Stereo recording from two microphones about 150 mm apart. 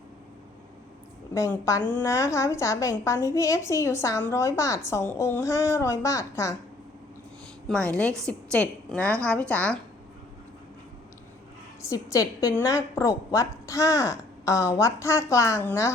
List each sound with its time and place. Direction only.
1.3 s a woman's voice: 20° left (ahead or behind)
7.7 s a woman's voice: 10° left (ahead or behind)
11.8 s a woman's voice: 20° left (ahead or behind)